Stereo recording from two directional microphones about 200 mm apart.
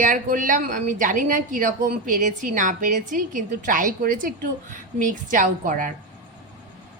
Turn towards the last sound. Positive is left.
turn(degrees=-45)  # may be behind; listen again after turning